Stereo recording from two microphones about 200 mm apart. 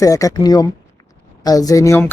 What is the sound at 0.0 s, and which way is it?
Speech, 15° left (ahead or behind).